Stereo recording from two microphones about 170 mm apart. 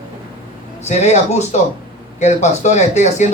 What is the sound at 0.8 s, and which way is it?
Speech, 40° left (ahead or behind).